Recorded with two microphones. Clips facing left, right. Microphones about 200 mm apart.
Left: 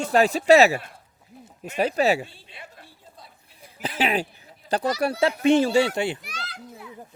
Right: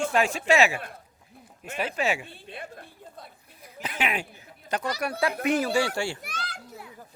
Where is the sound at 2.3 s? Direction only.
50° right (ahead or behind).